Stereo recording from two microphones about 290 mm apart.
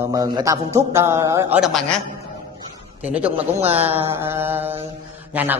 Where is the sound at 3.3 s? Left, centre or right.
Centre.